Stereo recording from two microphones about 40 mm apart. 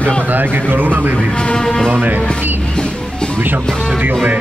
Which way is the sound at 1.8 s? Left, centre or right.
Right.